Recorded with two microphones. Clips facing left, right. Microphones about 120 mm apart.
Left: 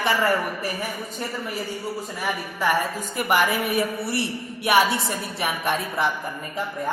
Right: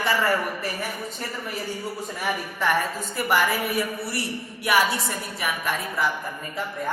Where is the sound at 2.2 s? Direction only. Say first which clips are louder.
Left 1 dB; 10° left (ahead or behind); by 6.1 s 25° left (ahead or behind).